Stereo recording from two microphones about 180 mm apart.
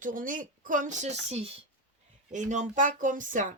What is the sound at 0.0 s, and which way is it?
Speech, 50° right (ahead or behind).